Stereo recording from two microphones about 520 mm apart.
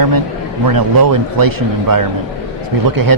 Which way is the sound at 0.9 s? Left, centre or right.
Right.